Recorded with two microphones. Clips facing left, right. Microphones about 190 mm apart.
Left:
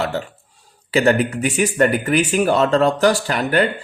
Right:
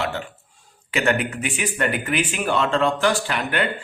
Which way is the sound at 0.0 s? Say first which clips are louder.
Left 4 dB; 40° left (ahead or behind).